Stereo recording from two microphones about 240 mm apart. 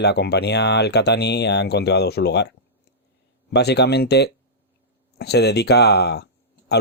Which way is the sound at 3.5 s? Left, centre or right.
Left.